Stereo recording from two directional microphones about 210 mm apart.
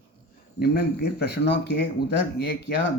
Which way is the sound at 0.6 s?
50° left (ahead or behind).